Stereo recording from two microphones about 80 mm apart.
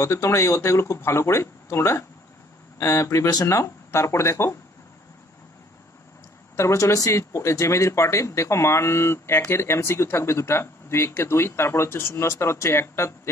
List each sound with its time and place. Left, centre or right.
0.0 s speech: left
6.5 s speech: left